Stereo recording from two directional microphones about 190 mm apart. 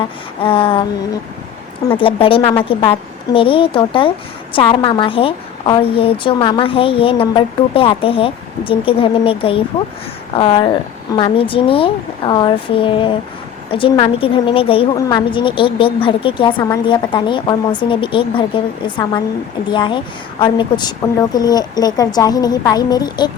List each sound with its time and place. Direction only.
0.0 s a woman's voice: 25° left (ahead or behind)
1.9 s a woman's voice: 30° left (ahead or behind)